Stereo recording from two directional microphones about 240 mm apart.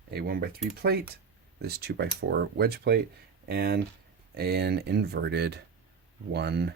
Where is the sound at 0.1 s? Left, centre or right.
Right.